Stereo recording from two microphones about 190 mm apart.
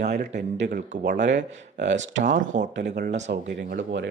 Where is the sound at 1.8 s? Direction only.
70° right (ahead or behind).